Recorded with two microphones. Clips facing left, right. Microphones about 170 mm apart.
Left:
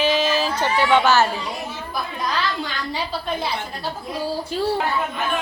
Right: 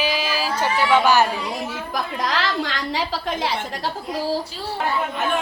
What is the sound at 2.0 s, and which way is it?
A woman's voice, 90° right.